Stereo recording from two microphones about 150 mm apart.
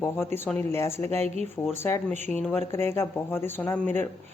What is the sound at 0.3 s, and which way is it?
Speech, 15° left (ahead or behind).